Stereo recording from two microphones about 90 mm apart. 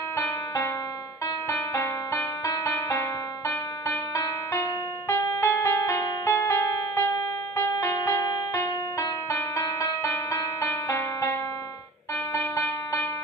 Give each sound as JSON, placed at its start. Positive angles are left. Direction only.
{"t": 0.1, "sound": "music", "side_deg": 30}
{"t": 4.1, "sound": "music", "side_deg": 35}
{"t": 12.3, "sound": "a sound", "side_deg": 35}